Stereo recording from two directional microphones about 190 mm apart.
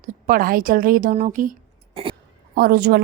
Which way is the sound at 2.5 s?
55° right (ahead or behind).